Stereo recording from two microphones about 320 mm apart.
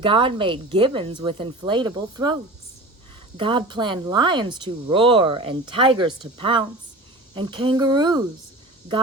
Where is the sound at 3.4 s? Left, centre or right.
Centre.